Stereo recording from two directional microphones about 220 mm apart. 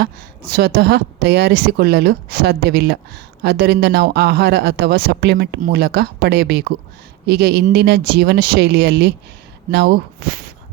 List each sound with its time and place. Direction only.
0.0 s speech: 45° right (ahead or behind)